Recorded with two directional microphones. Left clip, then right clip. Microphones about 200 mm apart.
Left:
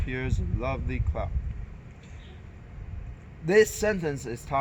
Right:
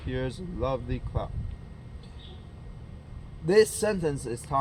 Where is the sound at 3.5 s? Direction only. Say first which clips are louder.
Even; 20° left (ahead or behind).